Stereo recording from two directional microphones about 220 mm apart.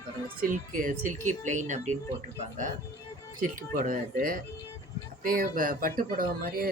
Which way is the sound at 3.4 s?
40° right (ahead or behind).